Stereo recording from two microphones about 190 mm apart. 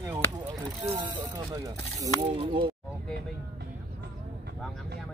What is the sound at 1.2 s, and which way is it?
Speech, 20° right (ahead or behind).